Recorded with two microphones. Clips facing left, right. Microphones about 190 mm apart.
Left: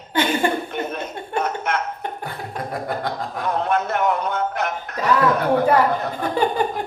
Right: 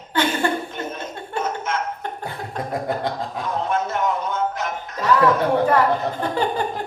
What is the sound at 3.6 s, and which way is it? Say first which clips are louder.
Music: left 1 dB; 65° left (ahead or behind).